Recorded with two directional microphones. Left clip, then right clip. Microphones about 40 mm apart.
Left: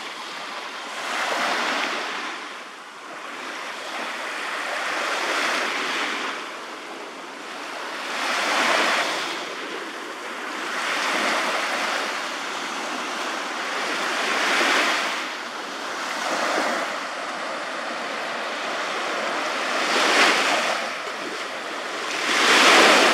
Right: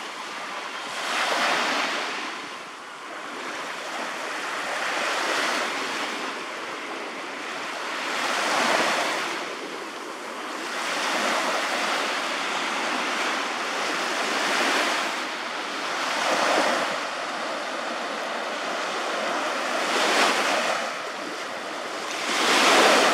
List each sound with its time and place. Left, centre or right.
1.0 s waves: right
5.0 s waves: centre
5.8 s waves: left
8.2 s waves: centre
8.5 s waves: left
10.9 s waves: centre; by 13.4 s right
14.3 s waves: left
16.0 s waves: right
19.1 s vehicle: centre
19.8 s waves: left
20.6 s waves: centre
22.1 s waves: left